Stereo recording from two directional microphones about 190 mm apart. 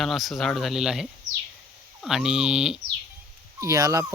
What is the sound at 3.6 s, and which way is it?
Speech, 15° right (ahead or behind).